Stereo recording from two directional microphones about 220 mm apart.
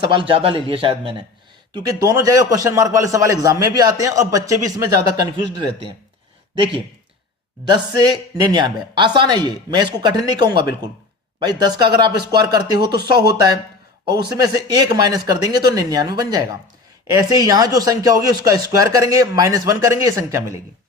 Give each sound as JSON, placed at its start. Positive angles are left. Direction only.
{"t": 0.0, "sound": "a woman's voice", "side_deg": -20}
{"t": 7.7, "sound": "a woman's voice", "side_deg": -20}